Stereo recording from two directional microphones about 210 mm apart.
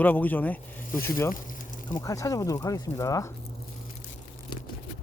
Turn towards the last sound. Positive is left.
turn(degrees=15)  # may be behind; listen again after turning